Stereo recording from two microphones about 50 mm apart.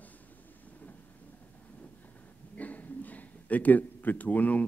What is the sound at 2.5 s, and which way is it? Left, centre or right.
A man's voice, left.